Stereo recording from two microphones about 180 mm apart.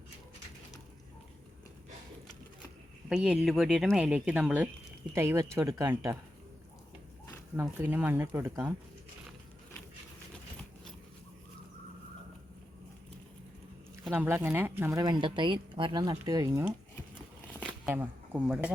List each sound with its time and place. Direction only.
3.1 s speech: 5° right (ahead or behind)
7.5 s speech: 10° right (ahead or behind)
14.1 s speech: 10° right (ahead or behind)
17.8 s speech: 10° right (ahead or behind)